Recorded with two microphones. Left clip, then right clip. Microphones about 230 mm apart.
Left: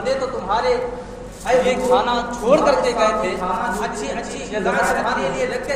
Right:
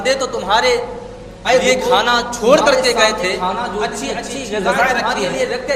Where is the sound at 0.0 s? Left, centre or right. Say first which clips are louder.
Right 4 dB; right.